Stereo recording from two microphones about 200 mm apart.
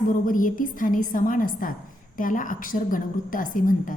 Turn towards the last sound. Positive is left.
turn(degrees=40)  # may be behind; listen again after turning